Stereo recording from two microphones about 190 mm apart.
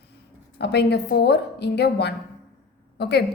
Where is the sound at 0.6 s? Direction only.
60° left (ahead or behind).